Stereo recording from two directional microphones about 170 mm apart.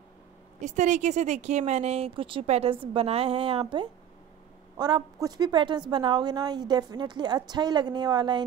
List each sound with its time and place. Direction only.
0.6 s a woman's voice: 45° right (ahead or behind); by 8.5 s 25° right (ahead or behind)